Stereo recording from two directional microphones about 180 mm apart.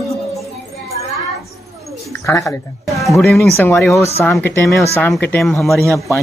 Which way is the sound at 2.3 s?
20° left (ahead or behind).